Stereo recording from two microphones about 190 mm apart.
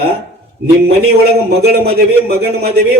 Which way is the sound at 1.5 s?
55° right (ahead or behind).